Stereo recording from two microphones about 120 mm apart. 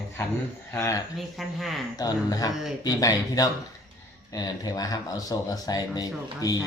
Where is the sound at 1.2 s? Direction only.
Centre (ahead or behind).